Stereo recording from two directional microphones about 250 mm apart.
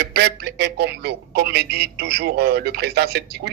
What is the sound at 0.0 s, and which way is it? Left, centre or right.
Telephone, right.